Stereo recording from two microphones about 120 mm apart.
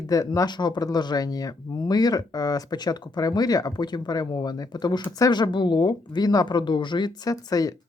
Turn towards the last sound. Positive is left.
turn(degrees=30)  # may be behind; listen again after turning